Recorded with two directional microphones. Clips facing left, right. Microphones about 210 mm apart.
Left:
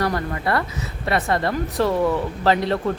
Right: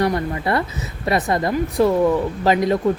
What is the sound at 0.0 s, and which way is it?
A woman's voice, 20° right (ahead or behind).